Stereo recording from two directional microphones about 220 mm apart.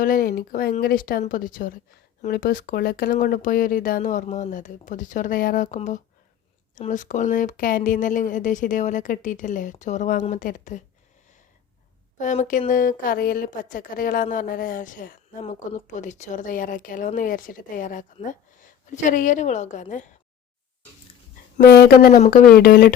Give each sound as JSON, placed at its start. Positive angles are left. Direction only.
{"t": 0.0, "sound": "a woman's voice", "side_deg": 40}
{"t": 12.1, "sound": "a woman's voice", "side_deg": 35}
{"t": 21.6, "sound": "a woman's voice", "side_deg": 45}